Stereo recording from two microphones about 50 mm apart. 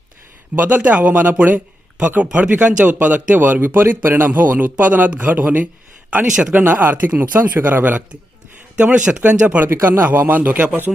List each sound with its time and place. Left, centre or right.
0.5 s speech: right
4.3 s a man's voice: right
9.6 s speech: right
10.1 s speech: right